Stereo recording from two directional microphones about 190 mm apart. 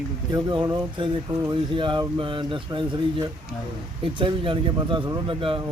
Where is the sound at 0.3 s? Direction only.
25° right (ahead or behind).